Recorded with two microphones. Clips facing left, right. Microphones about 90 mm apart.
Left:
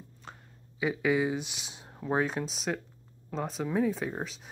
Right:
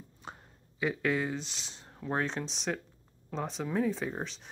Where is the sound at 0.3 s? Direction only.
15° right (ahead or behind).